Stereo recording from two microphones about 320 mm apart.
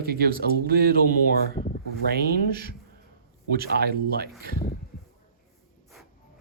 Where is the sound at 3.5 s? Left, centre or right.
Right.